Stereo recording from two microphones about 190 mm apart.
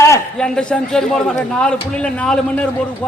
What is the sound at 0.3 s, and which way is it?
Speech, 5° left (ahead or behind).